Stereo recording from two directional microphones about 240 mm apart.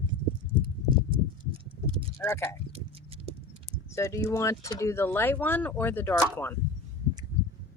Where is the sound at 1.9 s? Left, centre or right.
Centre.